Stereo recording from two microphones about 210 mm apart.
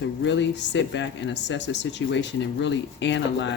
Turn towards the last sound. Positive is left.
turn(degrees=60)  # may be behind; listen again after turning